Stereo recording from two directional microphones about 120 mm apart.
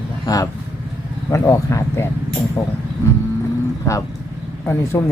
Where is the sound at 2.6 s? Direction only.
35° left (ahead or behind).